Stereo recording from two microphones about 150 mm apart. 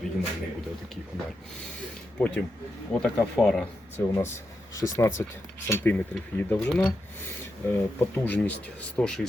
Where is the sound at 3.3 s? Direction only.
5° left (ahead or behind).